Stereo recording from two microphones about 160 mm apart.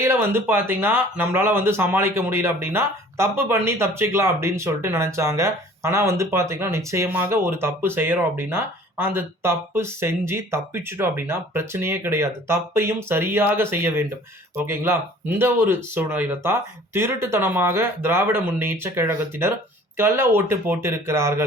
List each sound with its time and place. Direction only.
0.0 s speech: 15° right (ahead or behind)